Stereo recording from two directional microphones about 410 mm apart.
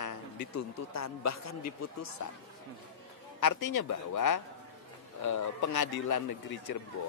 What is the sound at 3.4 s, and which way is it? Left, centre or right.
A man's voice, left.